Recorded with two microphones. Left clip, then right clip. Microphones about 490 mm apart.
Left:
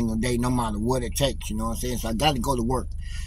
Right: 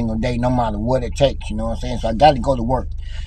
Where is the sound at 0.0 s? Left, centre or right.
Left.